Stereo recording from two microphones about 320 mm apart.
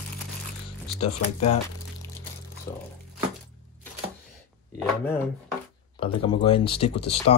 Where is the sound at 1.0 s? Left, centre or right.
Left.